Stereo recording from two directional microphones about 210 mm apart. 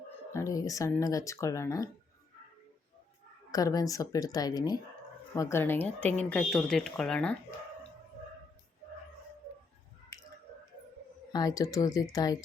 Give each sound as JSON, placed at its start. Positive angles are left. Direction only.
{"t": 0.3, "sound": "speech", "side_deg": 15}
{"t": 3.5, "sound": "speech", "side_deg": 15}
{"t": 10.1, "sound": "a sound", "side_deg": 15}
{"t": 11.3, "sound": "speech", "side_deg": 20}